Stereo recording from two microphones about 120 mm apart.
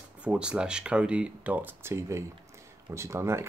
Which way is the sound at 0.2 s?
10° right (ahead or behind).